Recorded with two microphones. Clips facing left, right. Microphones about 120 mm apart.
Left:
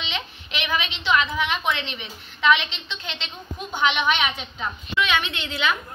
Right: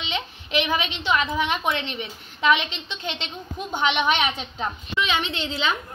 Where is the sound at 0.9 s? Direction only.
40° right (ahead or behind).